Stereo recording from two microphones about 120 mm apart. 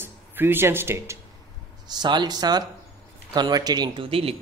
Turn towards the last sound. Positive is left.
turn(degrees=-50)  # may be behind; listen again after turning